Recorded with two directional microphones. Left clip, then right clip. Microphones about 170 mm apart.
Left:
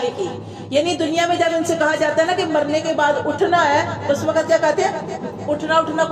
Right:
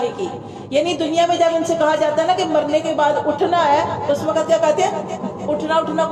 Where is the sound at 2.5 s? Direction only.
25° left (ahead or behind).